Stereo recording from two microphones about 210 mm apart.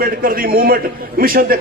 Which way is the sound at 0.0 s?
45° right (ahead or behind).